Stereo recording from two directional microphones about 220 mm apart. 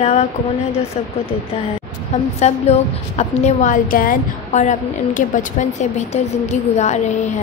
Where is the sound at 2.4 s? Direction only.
30° left (ahead or behind).